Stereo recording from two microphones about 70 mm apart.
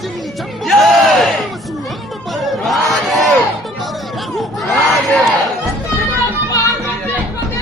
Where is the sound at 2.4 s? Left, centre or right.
Centre.